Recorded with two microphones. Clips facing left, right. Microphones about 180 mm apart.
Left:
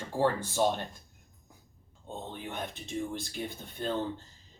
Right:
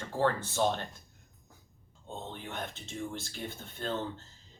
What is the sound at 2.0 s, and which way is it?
Speech, 15° left (ahead or behind).